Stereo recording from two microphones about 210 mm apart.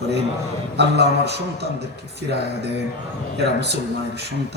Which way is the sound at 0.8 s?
55° right (ahead or behind).